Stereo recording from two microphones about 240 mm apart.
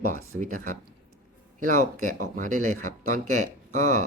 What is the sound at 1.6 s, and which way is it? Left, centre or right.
Speech, right.